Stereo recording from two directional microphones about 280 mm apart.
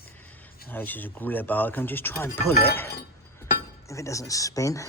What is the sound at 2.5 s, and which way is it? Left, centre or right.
Speech, left.